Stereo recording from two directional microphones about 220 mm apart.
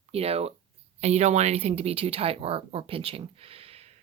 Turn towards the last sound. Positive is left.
turn(degrees=-25)  # may be behind; listen again after turning